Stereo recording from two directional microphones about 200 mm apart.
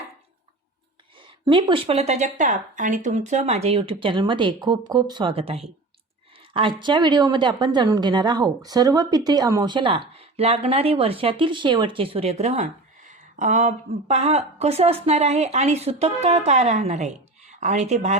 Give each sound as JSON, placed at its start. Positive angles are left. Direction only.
{"t": 1.5, "sound": "speech", "side_deg": -25}